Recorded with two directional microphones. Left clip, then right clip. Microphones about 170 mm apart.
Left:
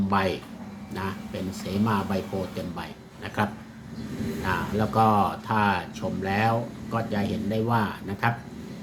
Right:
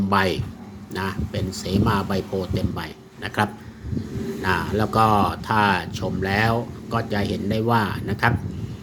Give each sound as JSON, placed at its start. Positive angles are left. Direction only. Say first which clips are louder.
{"t": 0.1, "sound": "speech", "louder": "right 5 dB", "side_deg": -50}
{"t": 3.2, "sound": "speech", "louder": "right 5 dB", "side_deg": -50}